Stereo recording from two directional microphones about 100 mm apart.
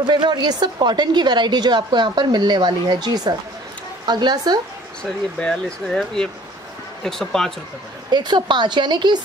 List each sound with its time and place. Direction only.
0.0 s a woman's voice: 50° right (ahead or behind)
5.4 s speech: 5° left (ahead or behind)
8.1 s a woman's voice: 45° right (ahead or behind)